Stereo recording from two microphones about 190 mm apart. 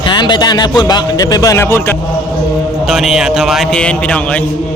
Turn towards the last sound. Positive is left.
turn(degrees=5)  # may be behind; listen again after turning